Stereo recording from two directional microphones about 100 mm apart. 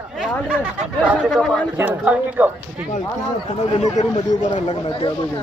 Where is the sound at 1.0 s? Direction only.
10° right (ahead or behind).